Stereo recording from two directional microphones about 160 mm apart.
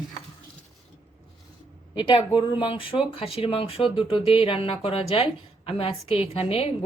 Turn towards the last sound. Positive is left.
turn(degrees=35)  # may be behind; listen again after turning